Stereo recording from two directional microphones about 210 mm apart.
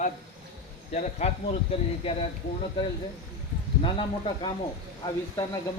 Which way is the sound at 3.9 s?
25° left (ahead or behind).